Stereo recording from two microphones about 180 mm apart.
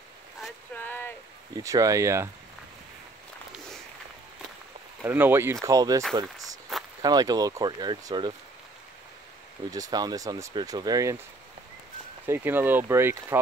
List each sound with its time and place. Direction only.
0.7 s a sound: 10° left (ahead or behind)
1.5 s speech: 20° right (ahead or behind)
5.0 s speech: 10° right (ahead or behind)
9.7 s speech: 20° right (ahead or behind)
12.3 s speech: 10° right (ahead or behind)